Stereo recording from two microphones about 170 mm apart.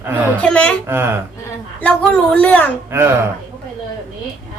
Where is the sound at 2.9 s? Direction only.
15° right (ahead or behind).